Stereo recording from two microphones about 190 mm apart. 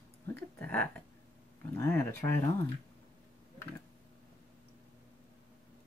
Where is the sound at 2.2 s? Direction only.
20° left (ahead or behind).